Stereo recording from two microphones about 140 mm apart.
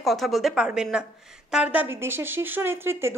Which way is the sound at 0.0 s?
Centre (ahead or behind).